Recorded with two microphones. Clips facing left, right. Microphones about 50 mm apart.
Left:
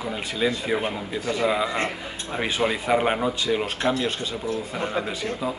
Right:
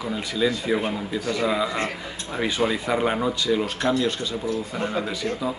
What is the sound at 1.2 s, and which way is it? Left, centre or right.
Speech, left.